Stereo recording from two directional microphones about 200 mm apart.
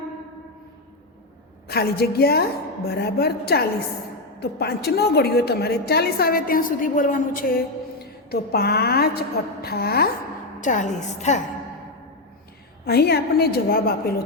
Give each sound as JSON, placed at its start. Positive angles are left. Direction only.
{"t": 1.6, "sound": "a woman's voice", "side_deg": 50}
{"t": 10.6, "sound": "a woman's voice", "side_deg": 40}
{"t": 12.8, "sound": "a woman's voice", "side_deg": 55}